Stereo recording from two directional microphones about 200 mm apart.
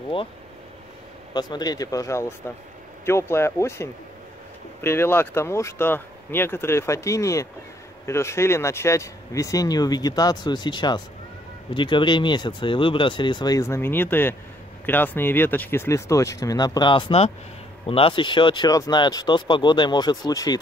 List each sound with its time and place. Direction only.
1.3 s speech: 20° left (ahead or behind)